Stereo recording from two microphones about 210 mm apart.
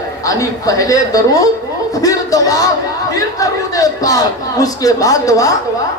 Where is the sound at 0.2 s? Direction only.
15° left (ahead or behind).